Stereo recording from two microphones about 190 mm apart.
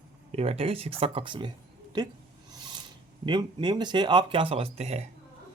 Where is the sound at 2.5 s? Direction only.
20° right (ahead or behind).